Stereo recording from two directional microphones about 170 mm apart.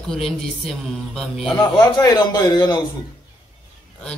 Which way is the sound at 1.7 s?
25° left (ahead or behind).